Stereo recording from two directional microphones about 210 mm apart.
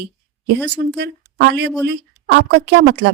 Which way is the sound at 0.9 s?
50° right (ahead or behind).